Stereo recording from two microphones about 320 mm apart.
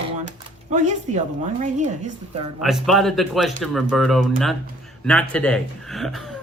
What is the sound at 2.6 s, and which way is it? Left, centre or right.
Speech, centre.